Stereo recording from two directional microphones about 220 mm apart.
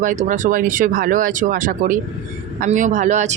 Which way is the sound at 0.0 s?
35° right (ahead or behind).